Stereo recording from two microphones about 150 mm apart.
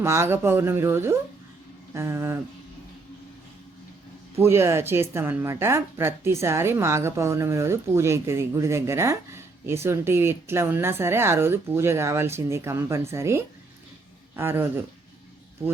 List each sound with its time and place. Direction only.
0.0 s speech: 15° right (ahead or behind)
4.4 s speech: 15° right (ahead or behind)